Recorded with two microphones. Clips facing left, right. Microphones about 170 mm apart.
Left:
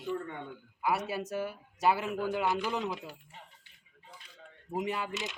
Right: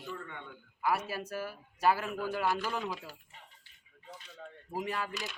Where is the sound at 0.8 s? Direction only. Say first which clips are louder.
Left 1 dB; 20° left (ahead or behind).